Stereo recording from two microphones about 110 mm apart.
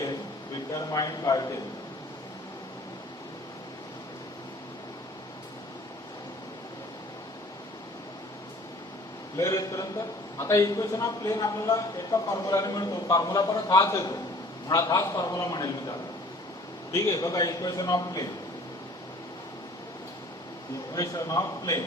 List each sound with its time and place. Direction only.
0.7 s a man's voice: 35° left (ahead or behind)
9.4 s a man's voice: 30° left (ahead or behind)
20.9 s a man's voice: 35° left (ahead or behind)